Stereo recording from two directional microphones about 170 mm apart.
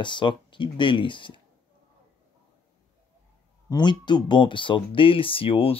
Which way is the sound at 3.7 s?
25° left (ahead or behind).